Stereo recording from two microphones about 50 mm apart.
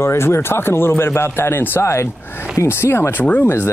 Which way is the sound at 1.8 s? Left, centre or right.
Left.